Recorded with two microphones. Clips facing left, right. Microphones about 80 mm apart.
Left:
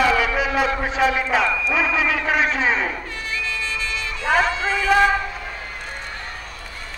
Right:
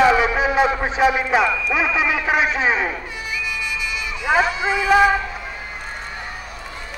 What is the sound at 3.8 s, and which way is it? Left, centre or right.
Emergency vehicle, centre.